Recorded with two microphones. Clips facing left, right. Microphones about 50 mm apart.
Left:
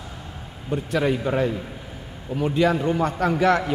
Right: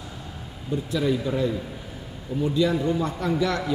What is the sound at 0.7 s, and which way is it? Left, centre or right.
A man's voice, left.